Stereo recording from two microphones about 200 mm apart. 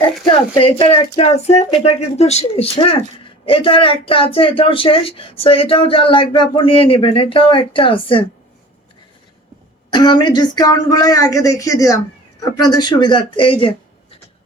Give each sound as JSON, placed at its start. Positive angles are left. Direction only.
{"t": 0.3, "sound": "speech", "side_deg": 25}
{"t": 9.9, "sound": "speech", "side_deg": 20}